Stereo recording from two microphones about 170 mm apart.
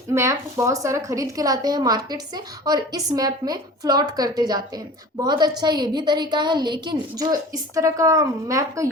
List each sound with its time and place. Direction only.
0.1 s a woman's voice: 15° right (ahead or behind)